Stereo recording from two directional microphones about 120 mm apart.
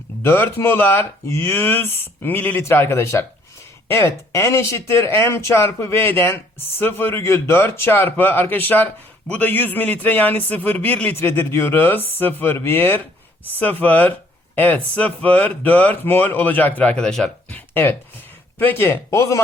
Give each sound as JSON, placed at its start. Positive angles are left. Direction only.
{"t": 0.2, "sound": "speech", "side_deg": 20}
{"t": 18.6, "sound": "speech", "side_deg": 20}